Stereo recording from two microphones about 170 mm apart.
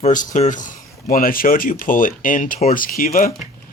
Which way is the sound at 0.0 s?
50° left (ahead or behind).